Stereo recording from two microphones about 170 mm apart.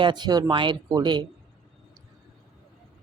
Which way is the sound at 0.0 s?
25° right (ahead or behind).